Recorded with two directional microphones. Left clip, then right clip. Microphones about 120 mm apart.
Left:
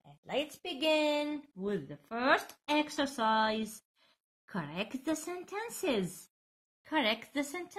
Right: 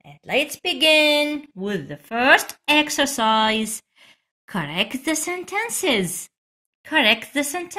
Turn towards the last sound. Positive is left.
turn(degrees=-15)  # may be behind; listen again after turning